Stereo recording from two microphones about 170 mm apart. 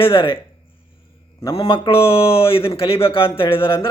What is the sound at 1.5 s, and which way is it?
Speech, 30° left (ahead or behind).